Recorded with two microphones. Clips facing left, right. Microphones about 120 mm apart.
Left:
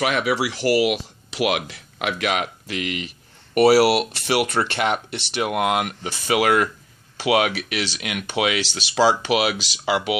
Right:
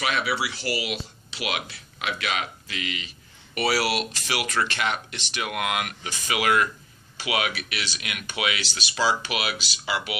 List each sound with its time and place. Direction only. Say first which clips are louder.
0.0 s speech: left 5 dB; 80° left; by 5.4 s 60° left (ahead or behind)
5.4 s speech: left 7 dB; 40° left (ahead or behind)
6.0 s speech: left 6 dB; 60° left (ahead or behind)
7.2 s speech: left 8 dB; 45° left (ahead or behind)
8.3 s speech: left 7 dB; 70° left (ahead or behind)